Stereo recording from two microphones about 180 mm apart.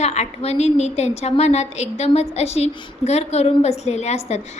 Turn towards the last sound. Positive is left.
turn(degrees=40)  # may be behind; listen again after turning